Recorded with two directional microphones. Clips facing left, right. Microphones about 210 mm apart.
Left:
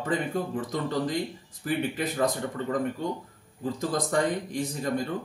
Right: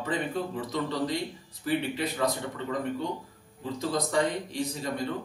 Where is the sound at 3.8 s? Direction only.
50° left (ahead or behind).